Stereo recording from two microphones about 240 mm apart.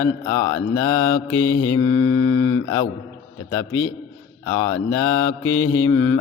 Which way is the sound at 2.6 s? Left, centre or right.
Centre.